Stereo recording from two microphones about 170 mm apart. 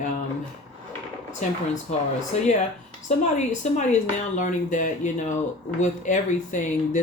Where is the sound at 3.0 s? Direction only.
45° left (ahead or behind).